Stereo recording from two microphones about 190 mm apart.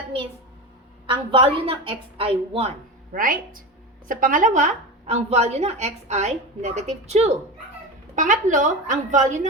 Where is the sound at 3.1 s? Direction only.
45° right (ahead or behind).